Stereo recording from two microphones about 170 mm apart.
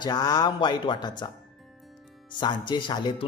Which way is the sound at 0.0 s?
25° left (ahead or behind).